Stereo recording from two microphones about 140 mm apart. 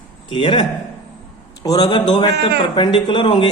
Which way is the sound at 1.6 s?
30° left (ahead or behind).